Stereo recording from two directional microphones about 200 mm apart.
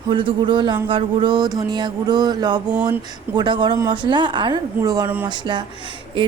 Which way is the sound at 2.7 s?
5° right (ahead or behind).